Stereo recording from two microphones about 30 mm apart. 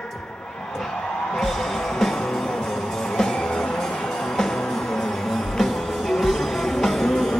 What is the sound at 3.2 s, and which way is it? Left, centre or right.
Music, left.